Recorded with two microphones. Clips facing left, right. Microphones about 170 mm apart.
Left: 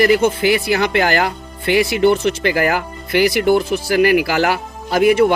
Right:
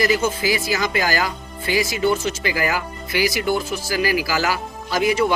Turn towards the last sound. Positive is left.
turn(degrees=55)  # may be behind; listen again after turning